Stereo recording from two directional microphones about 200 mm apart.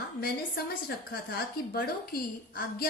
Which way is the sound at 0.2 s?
50° left (ahead or behind).